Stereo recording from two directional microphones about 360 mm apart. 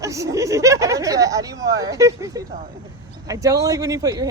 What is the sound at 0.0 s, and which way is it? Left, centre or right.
A man's voice, centre.